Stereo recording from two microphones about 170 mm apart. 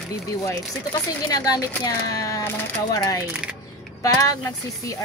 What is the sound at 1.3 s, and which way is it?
A woman's voice, 20° left (ahead or behind).